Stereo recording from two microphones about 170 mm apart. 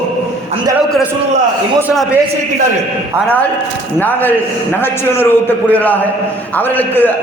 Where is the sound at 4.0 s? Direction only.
10° left (ahead or behind).